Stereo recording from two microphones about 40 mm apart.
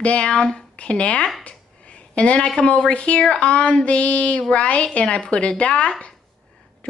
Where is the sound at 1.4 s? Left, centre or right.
Left.